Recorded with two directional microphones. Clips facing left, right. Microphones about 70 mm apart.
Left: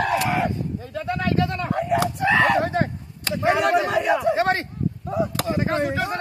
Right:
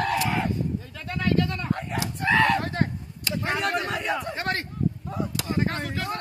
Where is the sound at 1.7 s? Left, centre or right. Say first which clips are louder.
Left 7 dB; centre.